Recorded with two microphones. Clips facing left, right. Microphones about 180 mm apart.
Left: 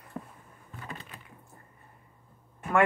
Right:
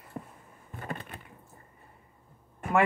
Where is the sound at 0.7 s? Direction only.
55° right (ahead or behind).